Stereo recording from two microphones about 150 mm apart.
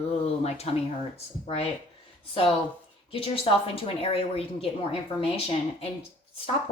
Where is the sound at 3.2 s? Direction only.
40° left (ahead or behind).